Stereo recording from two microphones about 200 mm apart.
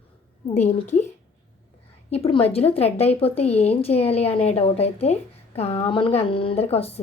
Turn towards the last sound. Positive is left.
turn(degrees=30)  # may be behind; listen again after turning